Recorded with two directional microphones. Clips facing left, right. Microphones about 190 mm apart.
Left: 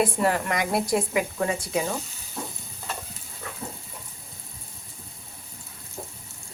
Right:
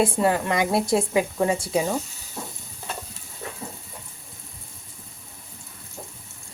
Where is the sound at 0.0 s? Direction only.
25° right (ahead or behind).